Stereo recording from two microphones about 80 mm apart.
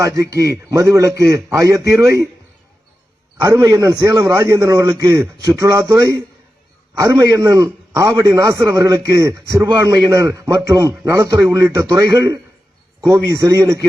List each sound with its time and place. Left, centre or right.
0.0 s a man's voice: right
3.4 s a man's voice: right
9.6 s a man's voice: right
13.0 s a man's voice: right